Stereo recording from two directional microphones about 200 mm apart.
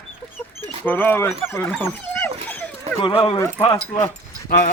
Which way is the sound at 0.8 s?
10° left (ahead or behind).